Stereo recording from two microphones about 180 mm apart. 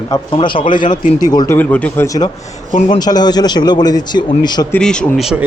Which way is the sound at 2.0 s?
20° left (ahead or behind).